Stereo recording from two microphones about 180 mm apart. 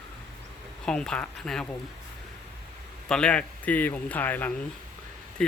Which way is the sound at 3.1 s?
5° left (ahead or behind).